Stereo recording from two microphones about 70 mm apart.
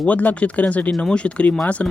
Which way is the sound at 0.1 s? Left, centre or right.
Left.